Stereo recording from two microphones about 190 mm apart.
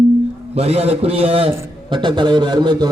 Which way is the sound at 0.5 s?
35° right (ahead or behind).